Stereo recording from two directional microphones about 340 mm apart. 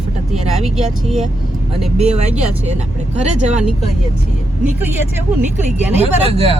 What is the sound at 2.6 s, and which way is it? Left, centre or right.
Speech, centre.